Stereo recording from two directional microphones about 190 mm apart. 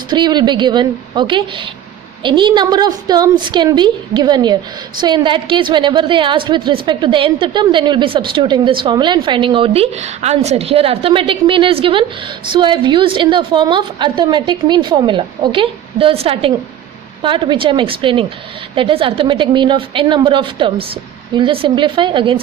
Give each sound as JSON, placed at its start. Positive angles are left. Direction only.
{"t": 0.1, "sound": "a woman's voice", "side_deg": -25}